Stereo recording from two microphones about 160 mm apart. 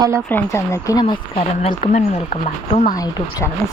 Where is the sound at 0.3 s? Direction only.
15° left (ahead or behind).